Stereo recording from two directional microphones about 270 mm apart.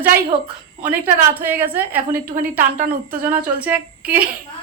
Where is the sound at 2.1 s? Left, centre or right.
Right.